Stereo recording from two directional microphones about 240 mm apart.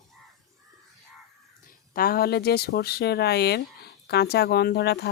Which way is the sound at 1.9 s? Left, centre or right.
Left.